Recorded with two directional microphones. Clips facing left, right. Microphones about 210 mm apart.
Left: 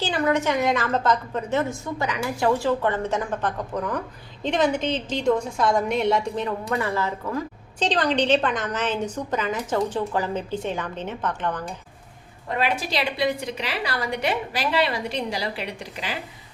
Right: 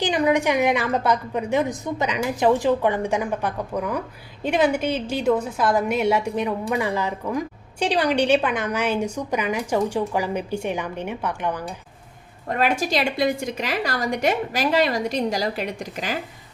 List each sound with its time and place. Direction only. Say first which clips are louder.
0.0 s a woman's voice: right 3 dB; 15° right (ahead or behind)
12.5 s a woman's voice: right 3 dB; 45° right (ahead or behind)